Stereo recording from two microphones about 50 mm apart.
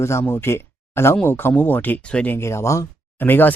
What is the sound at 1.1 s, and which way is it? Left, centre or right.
Speech, left.